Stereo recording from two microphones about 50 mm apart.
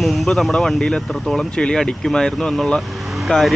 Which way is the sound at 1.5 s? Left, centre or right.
Centre.